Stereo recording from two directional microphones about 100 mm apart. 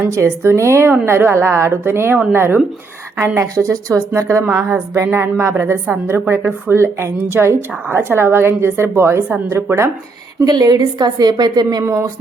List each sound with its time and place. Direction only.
0.1 s a woman's voice: 30° right (ahead or behind)
10.4 s a woman's voice: 40° right (ahead or behind)